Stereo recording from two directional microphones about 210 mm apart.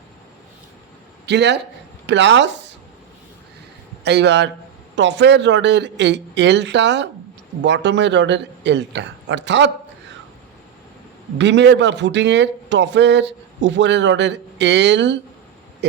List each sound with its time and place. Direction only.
1.3 s speech: 55° right (ahead or behind)
4.0 s speech: 55° right (ahead or behind)
11.3 s speech: 55° right (ahead or behind)